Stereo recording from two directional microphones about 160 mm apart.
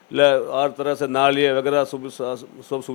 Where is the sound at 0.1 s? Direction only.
10° left (ahead or behind).